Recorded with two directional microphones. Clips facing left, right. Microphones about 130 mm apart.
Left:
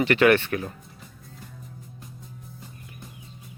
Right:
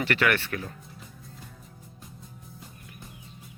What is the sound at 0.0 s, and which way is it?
Speech, 20° left (ahead or behind).